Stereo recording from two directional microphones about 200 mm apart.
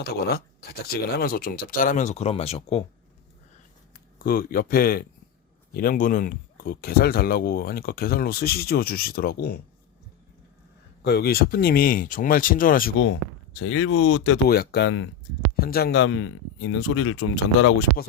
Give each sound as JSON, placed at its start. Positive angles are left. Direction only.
{"t": 0.0, "sound": "speech", "side_deg": 50}
{"t": 3.9, "sound": "speech", "side_deg": 45}
{"t": 11.0, "sound": "speech", "side_deg": 55}
{"t": 13.6, "sound": "speech", "side_deg": 90}
{"t": 14.4, "sound": "speech", "side_deg": 50}
{"t": 15.5, "sound": "speech", "side_deg": 50}
{"t": 16.0, "sound": "speech", "side_deg": 80}